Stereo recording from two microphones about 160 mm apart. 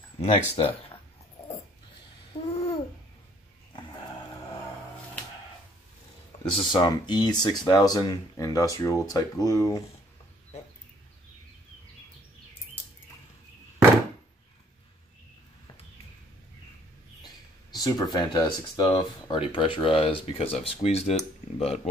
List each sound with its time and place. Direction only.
0.2 s speech: 35° left (ahead or behind)
2.5 s babbling: 40° left (ahead or behind)
6.4 s speech: 30° left (ahead or behind)
17.7 s speech: 25° left (ahead or behind); by 21.2 s 40° left (ahead or behind)